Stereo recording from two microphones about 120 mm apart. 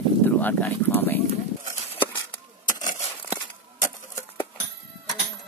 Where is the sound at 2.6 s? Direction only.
90° left.